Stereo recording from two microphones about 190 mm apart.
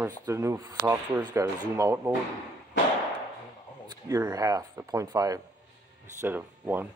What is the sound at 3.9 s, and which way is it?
Speech, 15° right (ahead or behind).